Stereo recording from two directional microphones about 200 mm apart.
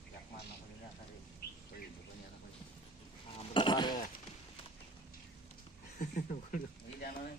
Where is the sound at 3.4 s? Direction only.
25° left (ahead or behind).